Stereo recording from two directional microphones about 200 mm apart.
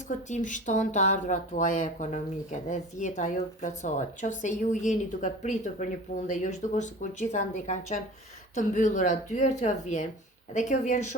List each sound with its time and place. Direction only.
0.3 s speech: 40° left (ahead or behind)